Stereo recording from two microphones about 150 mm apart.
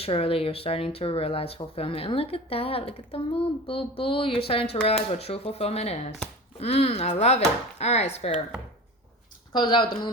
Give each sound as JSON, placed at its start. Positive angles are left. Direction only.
{"t": 0.0, "sound": "speech", "side_deg": 40}
{"t": 9.5, "sound": "speech", "side_deg": 30}